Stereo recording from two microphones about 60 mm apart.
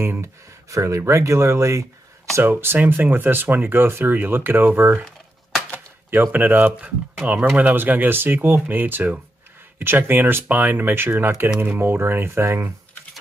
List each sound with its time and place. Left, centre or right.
0.0 s speech: right
0.7 s speech: right
2.5 s speech: right
6.3 s speech: right